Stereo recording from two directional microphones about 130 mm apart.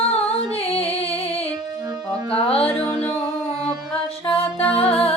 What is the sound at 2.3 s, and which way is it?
Music, 45° left (ahead or behind).